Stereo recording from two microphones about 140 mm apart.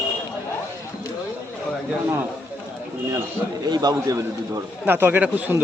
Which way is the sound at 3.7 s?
30° right (ahead or behind).